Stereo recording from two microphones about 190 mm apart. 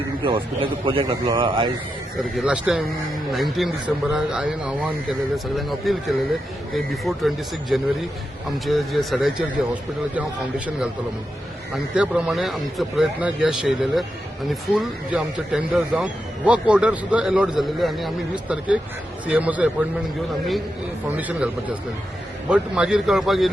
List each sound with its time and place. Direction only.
0.2 s a man's voice: 25° right (ahead or behind)
2.3 s a man's voice: 5° right (ahead or behind)
11.7 s a man's voice: 5° right (ahead or behind)
21.2 s a man's voice: 5° right (ahead or behind)